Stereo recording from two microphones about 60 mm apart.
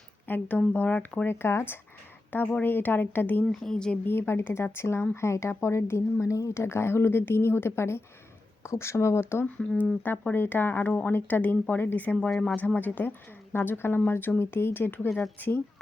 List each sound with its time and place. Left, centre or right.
0.3 s a woman's voice: left
1.3 s a woman's voice: left
2.3 s a woman's voice: left
3.5 s speech: centre
4.0 s speech: left
6.5 s speech: left
9.6 s speech: left
10.0 s a woman's voice: left
12.3 s speech: centre
12.5 s a woman's voice: left